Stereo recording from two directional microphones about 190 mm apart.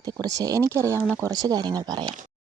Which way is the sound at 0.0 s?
20° right (ahead or behind).